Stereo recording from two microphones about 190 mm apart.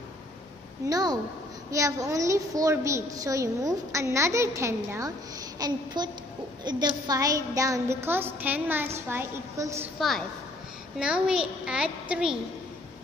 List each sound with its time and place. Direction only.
0.8 s a woman's voice: 20° right (ahead or behind)
9.9 s a child's voice: centre (ahead or behind)